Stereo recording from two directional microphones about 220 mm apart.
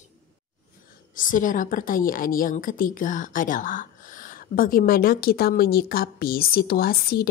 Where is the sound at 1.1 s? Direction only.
35° left (ahead or behind).